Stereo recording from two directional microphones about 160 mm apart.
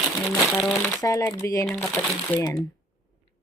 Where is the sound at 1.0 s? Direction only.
20° left (ahead or behind).